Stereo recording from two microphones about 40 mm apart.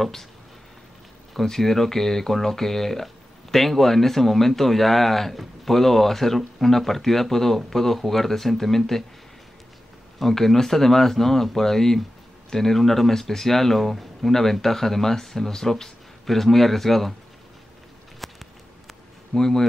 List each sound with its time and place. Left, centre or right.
0.0 s speech: centre
1.4 s speech: centre
10.1 s speech: centre
18.2 s a sound: centre
19.3 s speech: centre